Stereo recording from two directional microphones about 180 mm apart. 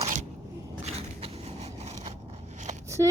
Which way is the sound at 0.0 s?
40° right (ahead or behind).